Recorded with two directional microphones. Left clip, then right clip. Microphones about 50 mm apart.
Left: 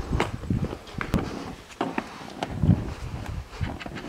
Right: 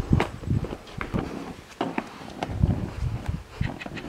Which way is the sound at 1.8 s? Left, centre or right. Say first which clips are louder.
Even; centre.